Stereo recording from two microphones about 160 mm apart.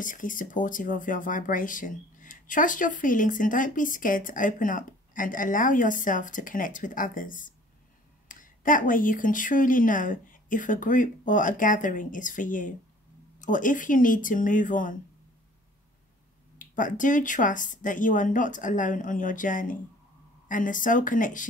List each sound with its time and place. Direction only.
0.0 s speech: 55° left (ahead or behind)
16.5 s speech: 55° left (ahead or behind)